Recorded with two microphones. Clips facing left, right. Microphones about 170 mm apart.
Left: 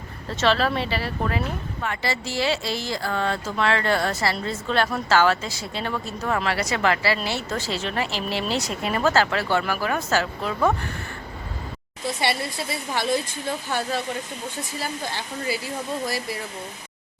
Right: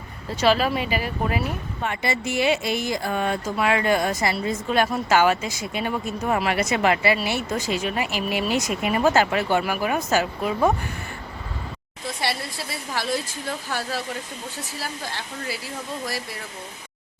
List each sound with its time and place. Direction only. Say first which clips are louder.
0.3 s speech: right 1 dB; 10° right (ahead or behind)
12.0 s speech: left 3 dB; centre (ahead or behind)